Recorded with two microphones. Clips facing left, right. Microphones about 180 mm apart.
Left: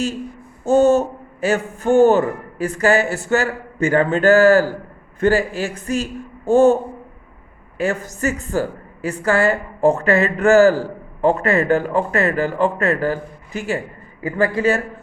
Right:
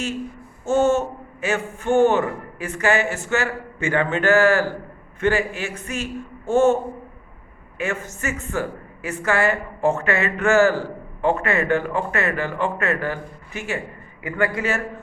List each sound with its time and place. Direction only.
0.6 s a woman's voice: 35° left (ahead or behind)
7.8 s a woman's voice: 35° left (ahead or behind)